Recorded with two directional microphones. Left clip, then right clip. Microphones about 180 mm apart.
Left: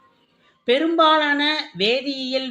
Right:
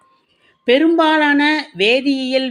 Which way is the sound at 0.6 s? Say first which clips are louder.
Right 4 dB; 35° right (ahead or behind).